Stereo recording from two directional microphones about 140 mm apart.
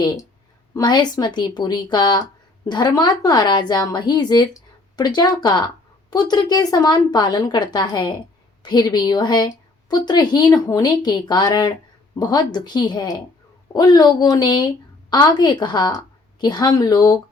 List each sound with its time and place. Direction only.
0.7 s a woman's voice: 30° left (ahead or behind)